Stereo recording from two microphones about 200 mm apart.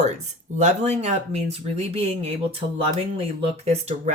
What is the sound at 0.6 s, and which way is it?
Speech, 35° right (ahead or behind).